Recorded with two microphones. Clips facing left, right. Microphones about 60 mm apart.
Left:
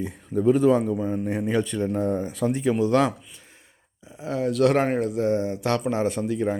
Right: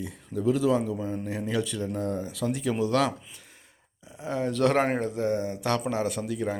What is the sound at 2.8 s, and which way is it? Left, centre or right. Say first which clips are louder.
Speech: left 4 dB; left.